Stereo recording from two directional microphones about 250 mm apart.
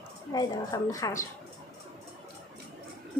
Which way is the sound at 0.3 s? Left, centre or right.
Centre.